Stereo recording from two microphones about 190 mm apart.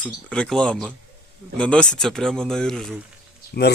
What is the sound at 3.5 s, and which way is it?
Speech, 55° left (ahead or behind).